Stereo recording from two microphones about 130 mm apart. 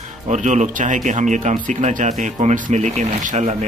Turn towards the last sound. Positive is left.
turn(degrees=-60)  # may be behind; listen again after turning